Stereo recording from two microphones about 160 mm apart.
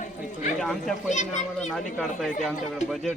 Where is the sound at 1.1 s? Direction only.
50° left (ahead or behind).